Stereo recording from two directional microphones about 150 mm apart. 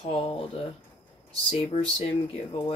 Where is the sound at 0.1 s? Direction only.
40° left (ahead or behind).